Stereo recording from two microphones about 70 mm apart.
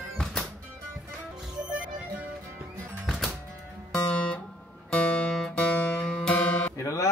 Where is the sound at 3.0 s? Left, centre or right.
Centre.